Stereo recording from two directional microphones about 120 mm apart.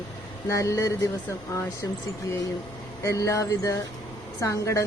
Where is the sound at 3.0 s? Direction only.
25° left (ahead or behind).